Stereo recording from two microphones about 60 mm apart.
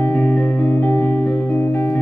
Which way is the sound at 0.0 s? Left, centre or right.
Left.